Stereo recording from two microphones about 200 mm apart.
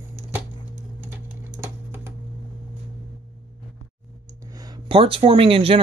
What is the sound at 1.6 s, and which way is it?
Typing, 10° right (ahead or behind).